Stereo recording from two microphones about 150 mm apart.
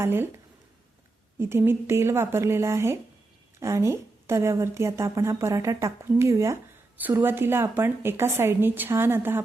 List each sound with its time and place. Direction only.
0.0 s a woman's voice: 15° right (ahead or behind)
1.4 s a woman's voice: 15° right (ahead or behind)